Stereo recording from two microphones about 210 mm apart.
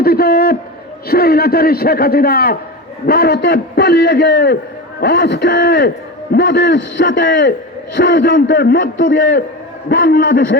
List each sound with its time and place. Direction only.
0.0 s a sound: 45° left (ahead or behind)
1.0 s a man's voice: 45° left (ahead or behind)
8.5 s a man's voice: 40° left (ahead or behind)